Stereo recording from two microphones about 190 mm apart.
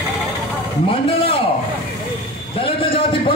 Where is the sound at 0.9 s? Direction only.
30° left (ahead or behind).